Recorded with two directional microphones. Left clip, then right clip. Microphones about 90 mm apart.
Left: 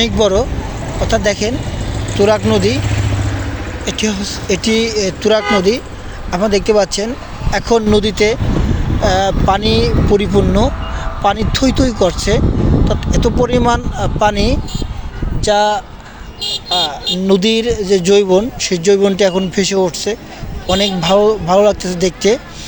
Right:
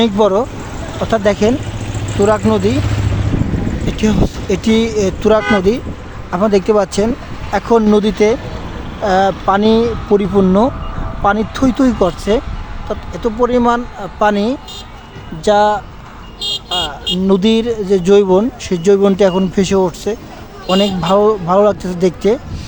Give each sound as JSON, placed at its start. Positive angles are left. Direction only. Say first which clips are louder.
{"t": 0.0, "sound": "speech", "louder": "right 1 dB", "side_deg": -55}
{"t": 1.0, "sound": "speech", "louder": "right 2 dB", "side_deg": -40}
{"t": 2.5, "sound": "speech", "louder": "left 1 dB", "side_deg": -50}
{"t": 3.8, "sound": "speech", "louder": "right 1 dB", "side_deg": -45}
{"t": 7.5, "sound": "speech", "louder": "right 1 dB", "side_deg": -25}
{"t": 9.0, "sound": "speech", "louder": "right 1 dB", "side_deg": -20}
{"t": 11.6, "sound": "speech", "louder": "even", "side_deg": -35}
{"t": 13.1, "sound": "speech", "louder": "right 1 dB", "side_deg": -10}
{"t": 15.4, "sound": "speech", "louder": "right 1 dB", "side_deg": -35}
{"t": 16.7, "sound": "speech", "louder": "left 4 dB", "side_deg": -20}